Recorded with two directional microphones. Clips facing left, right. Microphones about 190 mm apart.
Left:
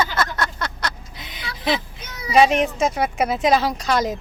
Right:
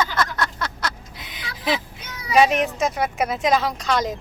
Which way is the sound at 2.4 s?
Centre (ahead or behind).